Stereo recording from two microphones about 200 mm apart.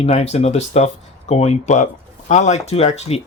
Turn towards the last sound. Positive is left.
turn(degrees=30)  # may be behind; listen again after turning